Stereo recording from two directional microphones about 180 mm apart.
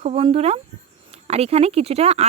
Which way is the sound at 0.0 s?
35° right (ahead or behind).